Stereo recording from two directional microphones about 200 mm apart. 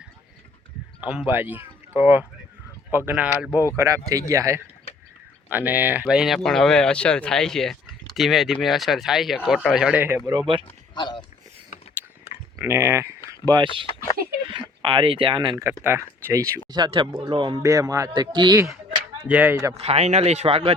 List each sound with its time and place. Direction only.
1.3 s speech: 10° right (ahead or behind)
10.9 s speech: 20° left (ahead or behind)
12.5 s speech: 15° right (ahead or behind)
15.8 s speech: 10° right (ahead or behind)
19.3 s speech: 10° right (ahead or behind)
19.7 s speech: 30° right (ahead or behind)